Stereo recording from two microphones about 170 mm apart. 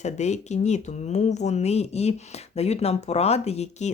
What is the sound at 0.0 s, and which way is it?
Speech, 40° left (ahead or behind).